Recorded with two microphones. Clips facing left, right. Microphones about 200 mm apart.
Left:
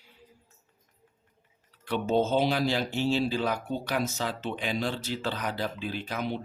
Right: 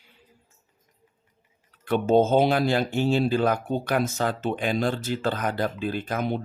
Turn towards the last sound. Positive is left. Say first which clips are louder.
# right 5 dB
turn(degrees=-50)  # may be behind; listen again after turning